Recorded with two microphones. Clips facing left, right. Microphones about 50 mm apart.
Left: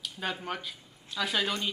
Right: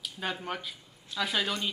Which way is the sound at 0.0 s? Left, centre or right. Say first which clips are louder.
Even; centre.